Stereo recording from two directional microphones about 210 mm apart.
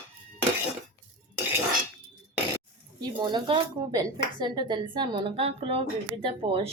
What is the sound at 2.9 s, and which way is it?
A woman's voice, 20° right (ahead or behind).